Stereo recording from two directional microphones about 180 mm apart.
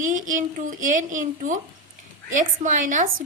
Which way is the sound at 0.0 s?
45° right (ahead or behind).